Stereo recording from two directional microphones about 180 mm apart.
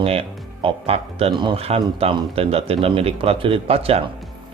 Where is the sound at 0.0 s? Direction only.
30° right (ahead or behind).